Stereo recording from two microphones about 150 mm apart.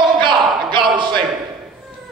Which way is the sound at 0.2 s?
30° right (ahead or behind).